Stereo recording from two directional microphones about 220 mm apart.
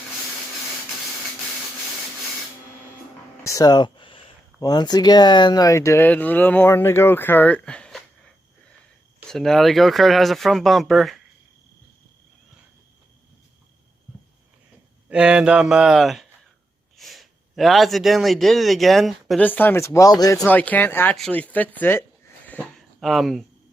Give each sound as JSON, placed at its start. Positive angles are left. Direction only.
{"t": 3.4, "sound": "speech", "side_deg": 15}
{"t": 9.3, "sound": "speech", "side_deg": 0}
{"t": 15.1, "sound": "speech", "side_deg": -5}
{"t": 22.4, "sound": "a sound", "side_deg": 5}